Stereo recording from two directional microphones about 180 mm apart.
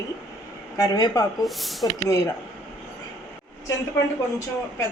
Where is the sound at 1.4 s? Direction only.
Centre (ahead or behind).